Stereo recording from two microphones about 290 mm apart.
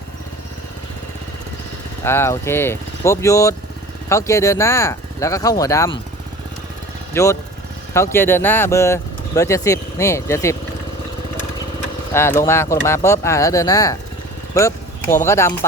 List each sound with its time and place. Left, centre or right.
2.0 s speech: centre
7.1 s speech: centre
12.1 s speech: centre
14.5 s vehicle: centre
15.3 s speech: centre